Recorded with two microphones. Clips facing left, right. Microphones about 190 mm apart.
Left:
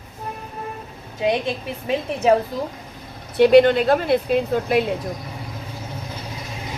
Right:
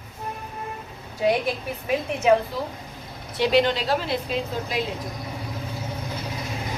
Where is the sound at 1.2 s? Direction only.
25° left (ahead or behind).